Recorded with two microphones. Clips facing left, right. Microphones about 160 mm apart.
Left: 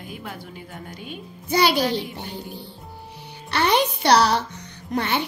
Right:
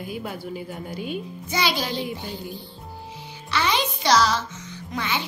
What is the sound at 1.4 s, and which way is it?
A woman's voice, 60° left (ahead or behind).